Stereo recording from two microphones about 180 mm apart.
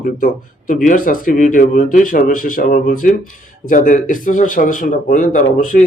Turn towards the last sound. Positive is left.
turn(degrees=45)  # may be behind; listen again after turning